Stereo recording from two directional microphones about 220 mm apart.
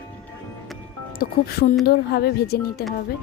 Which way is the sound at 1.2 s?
45° left (ahead or behind).